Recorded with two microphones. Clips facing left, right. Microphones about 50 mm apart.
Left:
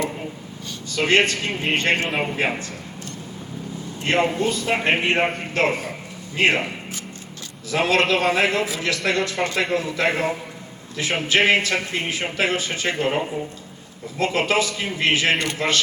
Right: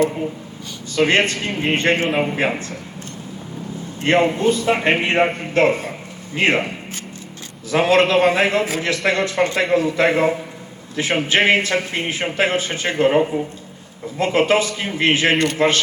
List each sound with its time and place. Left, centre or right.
0.9 s a man's voice: right
4.0 s a man's voice: right